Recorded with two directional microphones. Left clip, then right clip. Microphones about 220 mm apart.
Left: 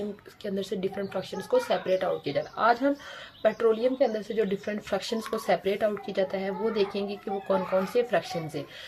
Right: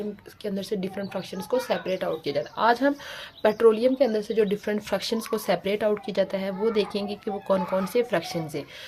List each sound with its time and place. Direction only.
0.4 s speech: 20° right (ahead or behind)